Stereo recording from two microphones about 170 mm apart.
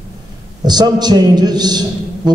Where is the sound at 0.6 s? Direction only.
25° right (ahead or behind).